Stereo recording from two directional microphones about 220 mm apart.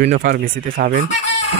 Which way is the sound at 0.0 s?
35° right (ahead or behind).